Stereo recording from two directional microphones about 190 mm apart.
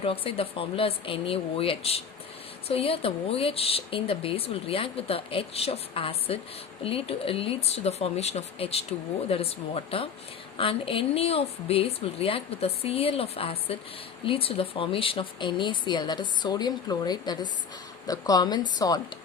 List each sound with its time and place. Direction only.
0.0 s speech: 30° left (ahead or behind)